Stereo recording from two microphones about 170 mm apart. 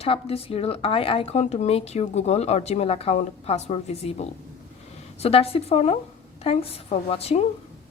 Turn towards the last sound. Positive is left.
turn(degrees=35)  # may be behind; listen again after turning